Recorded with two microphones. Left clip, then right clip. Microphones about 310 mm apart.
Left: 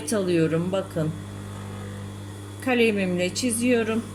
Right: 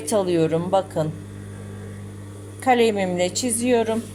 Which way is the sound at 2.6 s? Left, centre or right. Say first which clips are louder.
Right 4 dB; right.